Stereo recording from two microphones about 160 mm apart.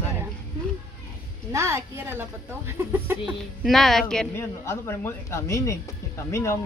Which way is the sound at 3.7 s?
Centre (ahead or behind).